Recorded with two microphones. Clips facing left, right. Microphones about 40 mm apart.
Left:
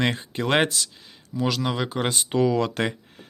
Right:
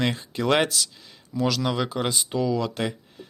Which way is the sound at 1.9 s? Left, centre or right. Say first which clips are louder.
Left 1 dB; left.